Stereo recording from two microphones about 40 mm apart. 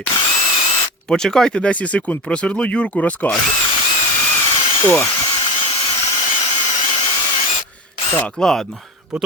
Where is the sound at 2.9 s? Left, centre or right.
Left.